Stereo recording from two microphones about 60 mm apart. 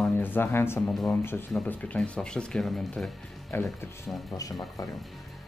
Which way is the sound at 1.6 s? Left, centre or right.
Left.